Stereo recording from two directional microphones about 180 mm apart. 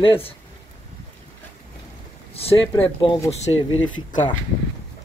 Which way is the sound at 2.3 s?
35° left (ahead or behind).